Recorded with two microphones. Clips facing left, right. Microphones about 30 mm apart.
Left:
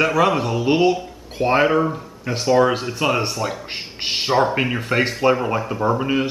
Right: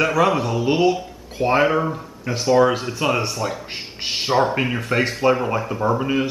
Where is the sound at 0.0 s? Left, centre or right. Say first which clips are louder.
Left 1 dB; centre.